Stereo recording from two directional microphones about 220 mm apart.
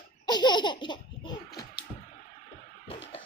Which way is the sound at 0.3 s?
20° left (ahead or behind).